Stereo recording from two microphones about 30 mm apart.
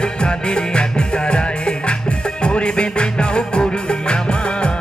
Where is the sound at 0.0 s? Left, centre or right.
Left.